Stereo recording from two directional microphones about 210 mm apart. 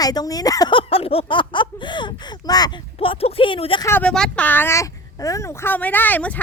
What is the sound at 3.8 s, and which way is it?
Speech, 10° left (ahead or behind).